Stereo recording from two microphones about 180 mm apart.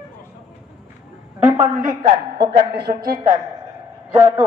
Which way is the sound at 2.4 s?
60° right (ahead or behind).